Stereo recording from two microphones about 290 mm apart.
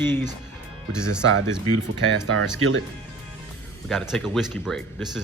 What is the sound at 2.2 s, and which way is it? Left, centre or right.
Speech, right.